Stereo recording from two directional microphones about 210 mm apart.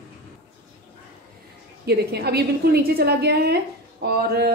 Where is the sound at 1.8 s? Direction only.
50° right (ahead or behind).